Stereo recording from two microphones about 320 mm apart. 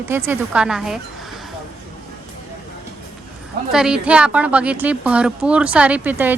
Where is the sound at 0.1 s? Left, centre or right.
Centre.